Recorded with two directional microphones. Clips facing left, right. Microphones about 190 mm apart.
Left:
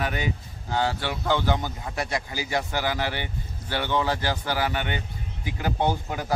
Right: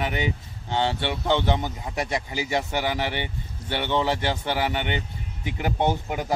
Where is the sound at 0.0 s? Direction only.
20° right (ahead or behind).